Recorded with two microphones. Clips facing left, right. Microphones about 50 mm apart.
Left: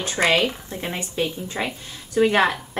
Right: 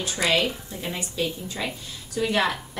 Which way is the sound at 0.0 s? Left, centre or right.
Left.